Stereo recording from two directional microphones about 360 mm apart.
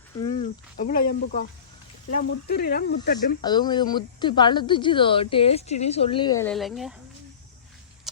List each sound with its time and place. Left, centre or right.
0.3 s speech: centre
3.4 s speech: centre